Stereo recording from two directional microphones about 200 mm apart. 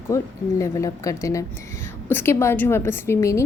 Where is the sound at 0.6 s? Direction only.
15° left (ahead or behind).